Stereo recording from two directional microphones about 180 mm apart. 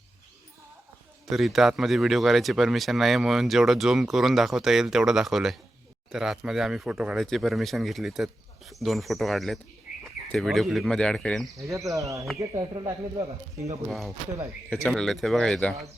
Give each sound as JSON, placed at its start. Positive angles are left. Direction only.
{"t": 1.3, "sound": "speech", "side_deg": 0}
{"t": 11.6, "sound": "speech", "side_deg": -15}
{"t": 14.7, "sound": "speech", "side_deg": 5}